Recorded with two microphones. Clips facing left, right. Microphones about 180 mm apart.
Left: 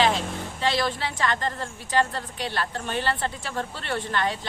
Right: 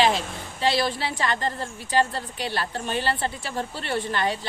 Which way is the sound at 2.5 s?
30° right (ahead or behind).